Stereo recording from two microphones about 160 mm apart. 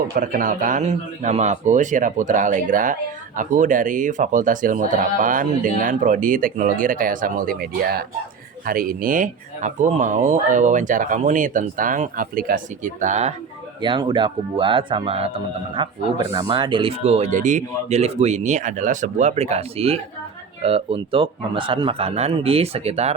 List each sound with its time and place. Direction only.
0.1 s speech: 65° right (ahead or behind)
8.6 s speech: 65° right (ahead or behind); by 13.3 s 45° right (ahead or behind)
13.8 s speech: 30° right (ahead or behind)